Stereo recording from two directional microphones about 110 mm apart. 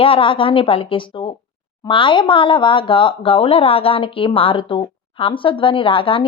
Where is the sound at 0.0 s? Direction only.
55° left (ahead or behind).